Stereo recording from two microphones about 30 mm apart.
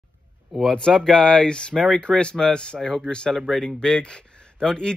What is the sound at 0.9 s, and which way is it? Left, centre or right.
Speech, centre.